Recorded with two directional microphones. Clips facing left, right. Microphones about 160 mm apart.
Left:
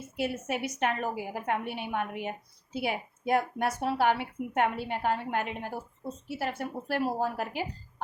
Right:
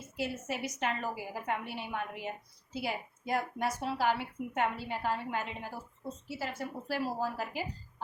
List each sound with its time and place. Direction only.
0.2 s speech: 60° left (ahead or behind)